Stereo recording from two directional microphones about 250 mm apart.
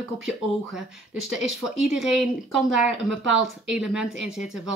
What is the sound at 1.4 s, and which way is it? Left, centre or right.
Speech, right.